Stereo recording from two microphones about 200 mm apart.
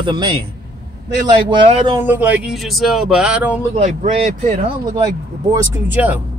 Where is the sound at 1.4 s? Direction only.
25° right (ahead or behind).